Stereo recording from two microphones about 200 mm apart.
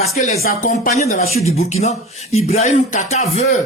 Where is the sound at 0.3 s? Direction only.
50° left (ahead or behind).